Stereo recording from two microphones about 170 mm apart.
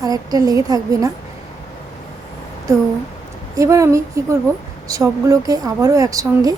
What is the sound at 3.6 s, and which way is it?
A woman's voice, 20° right (ahead or behind).